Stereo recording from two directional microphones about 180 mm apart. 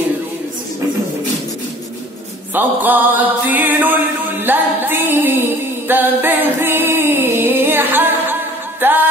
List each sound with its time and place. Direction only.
2.5 s music: 10° right (ahead or behind)